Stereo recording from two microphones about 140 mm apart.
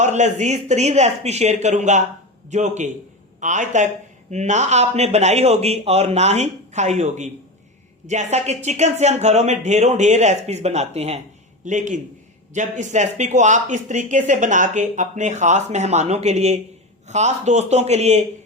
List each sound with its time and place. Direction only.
0.0 s speech: 55° right (ahead or behind)
11.6 s speech: 60° right (ahead or behind)